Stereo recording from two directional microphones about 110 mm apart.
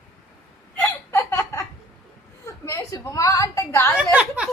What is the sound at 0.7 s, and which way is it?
Hiccup, 20° left (ahead or behind).